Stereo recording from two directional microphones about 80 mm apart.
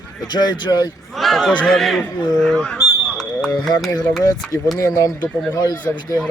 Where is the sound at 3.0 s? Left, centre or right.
Centre.